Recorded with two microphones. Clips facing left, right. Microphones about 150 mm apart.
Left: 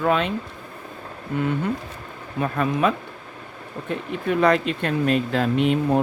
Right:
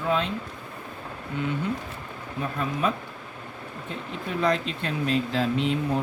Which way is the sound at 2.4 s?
70° left (ahead or behind).